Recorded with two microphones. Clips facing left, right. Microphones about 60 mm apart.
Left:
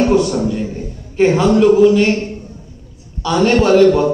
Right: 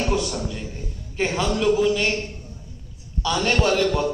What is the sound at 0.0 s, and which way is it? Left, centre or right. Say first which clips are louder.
A man's voice: left 11 dB; left.